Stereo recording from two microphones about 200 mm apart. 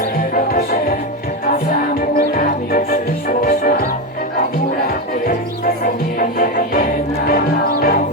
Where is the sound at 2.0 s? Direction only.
45° left (ahead or behind).